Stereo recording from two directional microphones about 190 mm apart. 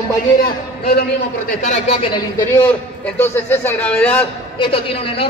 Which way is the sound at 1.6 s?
35° left (ahead or behind).